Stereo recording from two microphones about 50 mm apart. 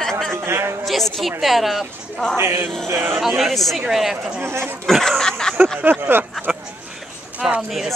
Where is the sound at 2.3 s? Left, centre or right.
Right.